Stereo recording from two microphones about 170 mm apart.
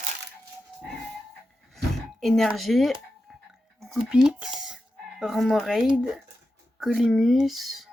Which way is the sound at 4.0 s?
5° right (ahead or behind).